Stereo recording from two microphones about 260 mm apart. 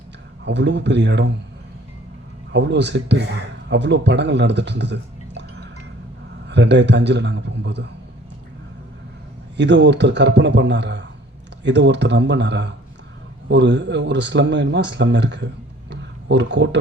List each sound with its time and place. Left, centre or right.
0.4 s a man's voice: right
2.5 s a man's voice: right
9.6 s a man's voice: right
15.9 s a sound: right